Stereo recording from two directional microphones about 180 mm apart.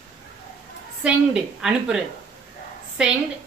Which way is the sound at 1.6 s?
5° right (ahead or behind).